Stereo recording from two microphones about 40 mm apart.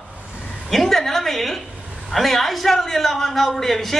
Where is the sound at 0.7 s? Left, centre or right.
Centre.